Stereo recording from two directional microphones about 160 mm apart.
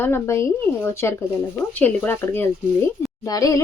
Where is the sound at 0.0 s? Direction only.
15° left (ahead or behind).